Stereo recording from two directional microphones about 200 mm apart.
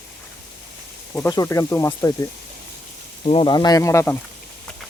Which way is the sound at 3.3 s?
25° left (ahead or behind).